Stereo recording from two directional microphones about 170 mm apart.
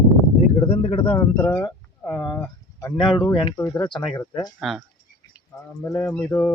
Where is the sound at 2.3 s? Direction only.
15° left (ahead or behind).